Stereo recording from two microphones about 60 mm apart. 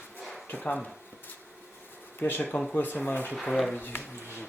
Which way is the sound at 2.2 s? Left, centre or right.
Left.